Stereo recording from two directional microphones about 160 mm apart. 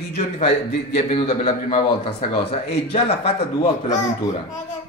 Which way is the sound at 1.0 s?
40° left (ahead or behind).